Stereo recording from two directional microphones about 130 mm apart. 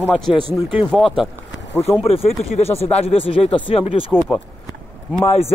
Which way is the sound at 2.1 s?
50° left (ahead or behind).